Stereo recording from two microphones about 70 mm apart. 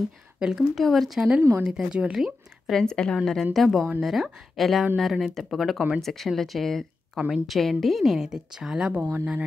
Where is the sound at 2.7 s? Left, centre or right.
Centre.